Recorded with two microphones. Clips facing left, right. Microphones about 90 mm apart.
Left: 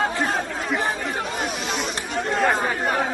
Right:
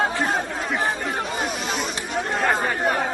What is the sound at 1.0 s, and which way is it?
Chatter, centre (ahead or behind).